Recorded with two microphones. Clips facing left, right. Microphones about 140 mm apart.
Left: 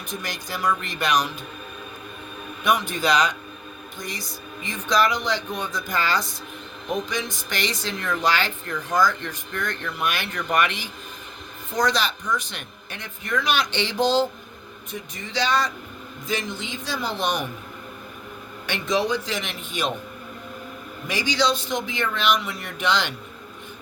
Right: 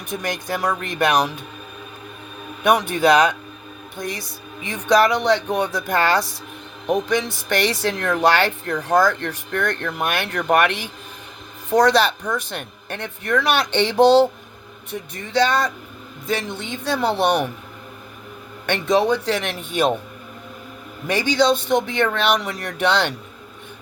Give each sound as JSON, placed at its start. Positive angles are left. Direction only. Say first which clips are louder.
{"t": 0.1, "sound": "speech", "louder": "right 8 dB", "side_deg": -60}
{"t": 2.6, "sound": "speech", "louder": "right 6 dB", "side_deg": -60}
{"t": 18.6, "sound": "speech", "louder": "right 6 dB", "side_deg": -60}
{"t": 21.1, "sound": "speech", "louder": "right 6 dB", "side_deg": -55}